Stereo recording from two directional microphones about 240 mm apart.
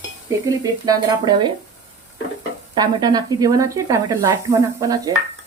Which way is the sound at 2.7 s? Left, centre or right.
Centre.